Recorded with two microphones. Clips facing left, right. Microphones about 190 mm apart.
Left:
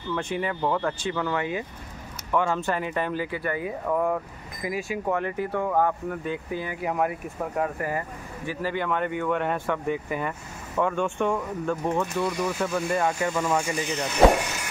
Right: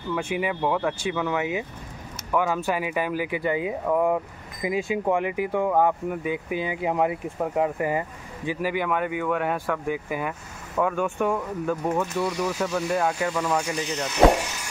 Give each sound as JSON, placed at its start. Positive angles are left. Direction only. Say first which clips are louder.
{"t": 0.1, "sound": "speech", "louder": "right 2 dB", "side_deg": -10}